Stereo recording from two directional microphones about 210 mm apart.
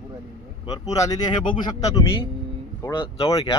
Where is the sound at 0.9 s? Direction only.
20° left (ahead or behind).